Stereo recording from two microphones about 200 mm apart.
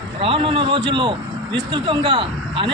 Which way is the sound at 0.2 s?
25° right (ahead or behind).